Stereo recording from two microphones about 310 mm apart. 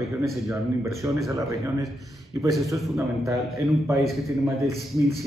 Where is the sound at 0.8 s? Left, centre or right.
Centre.